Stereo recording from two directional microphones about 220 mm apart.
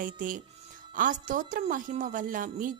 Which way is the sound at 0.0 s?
40° right (ahead or behind).